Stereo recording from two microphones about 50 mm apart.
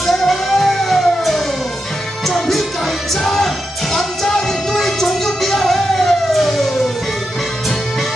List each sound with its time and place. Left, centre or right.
0.0 s music: centre